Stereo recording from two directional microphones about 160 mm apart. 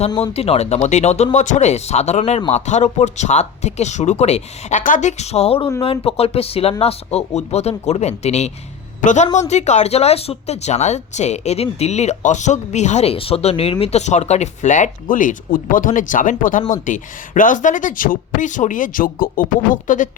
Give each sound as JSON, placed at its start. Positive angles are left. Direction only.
{"t": 0.3, "sound": "speech", "side_deg": 40}